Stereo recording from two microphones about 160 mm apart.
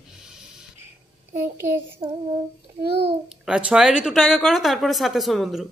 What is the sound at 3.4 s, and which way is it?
Speech, 5° right (ahead or behind).